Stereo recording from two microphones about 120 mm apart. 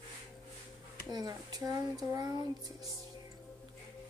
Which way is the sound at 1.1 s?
35° right (ahead or behind).